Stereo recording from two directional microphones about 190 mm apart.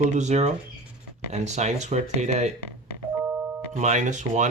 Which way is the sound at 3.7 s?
35° right (ahead or behind).